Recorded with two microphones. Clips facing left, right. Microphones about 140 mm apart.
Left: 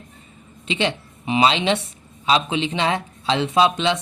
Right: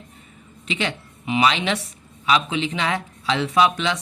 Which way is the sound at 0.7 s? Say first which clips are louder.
Left 4 dB; 25° left (ahead or behind).